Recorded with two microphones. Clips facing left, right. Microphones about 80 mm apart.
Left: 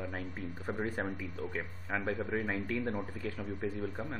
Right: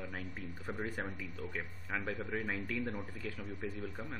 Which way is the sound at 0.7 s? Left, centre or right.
Centre.